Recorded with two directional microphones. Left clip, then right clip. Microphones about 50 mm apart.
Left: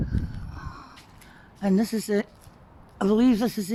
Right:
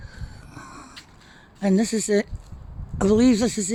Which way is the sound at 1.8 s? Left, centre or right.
Right.